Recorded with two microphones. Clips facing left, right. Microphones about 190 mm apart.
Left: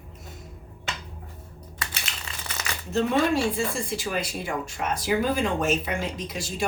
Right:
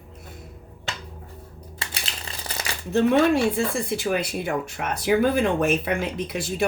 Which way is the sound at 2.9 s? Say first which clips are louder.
Right 4 dB; 60° right (ahead or behind).